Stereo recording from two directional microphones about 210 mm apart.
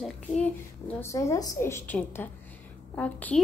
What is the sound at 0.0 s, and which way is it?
A woman's voice, 5° left (ahead or behind).